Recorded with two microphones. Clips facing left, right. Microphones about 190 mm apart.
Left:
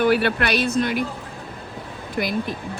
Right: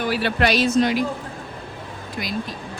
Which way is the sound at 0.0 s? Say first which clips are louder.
Left 2 dB; 55° left (ahead or behind).